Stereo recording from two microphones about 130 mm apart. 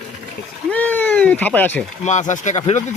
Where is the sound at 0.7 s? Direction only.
10° left (ahead or behind).